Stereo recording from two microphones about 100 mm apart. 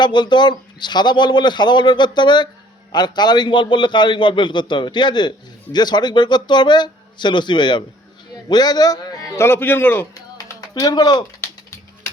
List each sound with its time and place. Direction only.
0.0 s a man's voice: 50° left (ahead or behind)
9.3 s a man's voice: 25° left (ahead or behind)
10.2 s a sound: 35° left (ahead or behind)